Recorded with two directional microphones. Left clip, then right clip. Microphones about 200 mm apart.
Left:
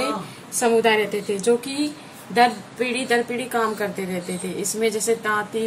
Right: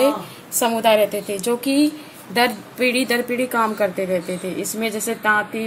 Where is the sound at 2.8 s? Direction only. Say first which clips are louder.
Right 3 dB; 50° right (ahead or behind).